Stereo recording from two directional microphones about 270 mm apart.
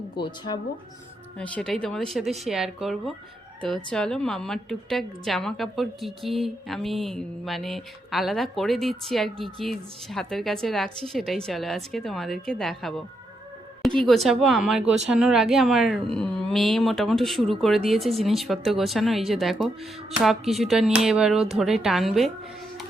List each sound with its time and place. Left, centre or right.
0.2 s speech: centre
1.4 s a woman's voice: centre